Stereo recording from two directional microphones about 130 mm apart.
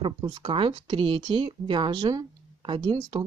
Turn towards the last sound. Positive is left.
turn(degrees=-40)  # may be behind; listen again after turning